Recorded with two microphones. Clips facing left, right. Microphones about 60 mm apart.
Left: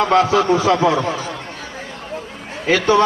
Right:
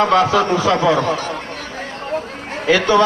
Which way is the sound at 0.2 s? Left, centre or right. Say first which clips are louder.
Even; right.